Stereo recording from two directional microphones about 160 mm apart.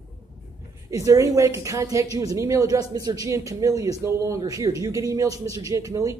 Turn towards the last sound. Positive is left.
turn(degrees=-20)  # may be behind; listen again after turning